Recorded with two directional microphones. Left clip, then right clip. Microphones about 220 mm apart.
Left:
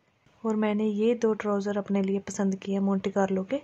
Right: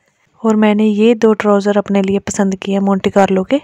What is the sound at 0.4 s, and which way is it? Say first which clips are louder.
Speech: right 15 dB; 45° right (ahead or behind).